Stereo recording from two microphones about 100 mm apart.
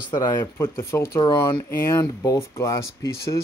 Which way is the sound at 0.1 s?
30° left (ahead or behind).